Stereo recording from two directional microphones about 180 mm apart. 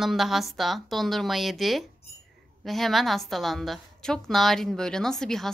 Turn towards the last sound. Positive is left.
turn(degrees=0)  # may be behind; listen again after turning